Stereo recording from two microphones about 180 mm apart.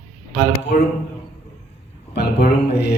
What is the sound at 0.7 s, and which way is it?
Speech, 50° left (ahead or behind).